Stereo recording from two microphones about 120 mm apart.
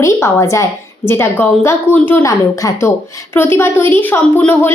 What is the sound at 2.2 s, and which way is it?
A woman's voice, 25° left (ahead or behind).